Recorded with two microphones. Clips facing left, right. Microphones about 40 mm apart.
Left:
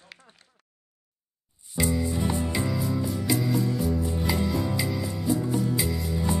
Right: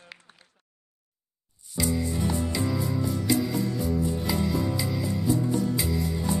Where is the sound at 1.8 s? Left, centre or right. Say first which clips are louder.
Left 1 dB; left.